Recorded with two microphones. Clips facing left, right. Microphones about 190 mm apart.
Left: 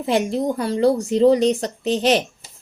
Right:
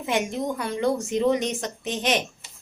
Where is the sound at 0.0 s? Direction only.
35° left (ahead or behind).